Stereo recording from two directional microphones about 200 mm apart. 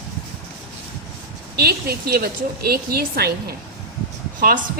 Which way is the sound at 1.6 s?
50° right (ahead or behind).